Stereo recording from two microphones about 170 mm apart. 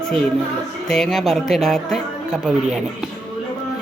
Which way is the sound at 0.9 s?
Centre (ahead or behind).